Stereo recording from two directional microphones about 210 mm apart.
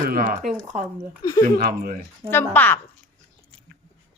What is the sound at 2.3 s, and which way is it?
Speech, 10° left (ahead or behind).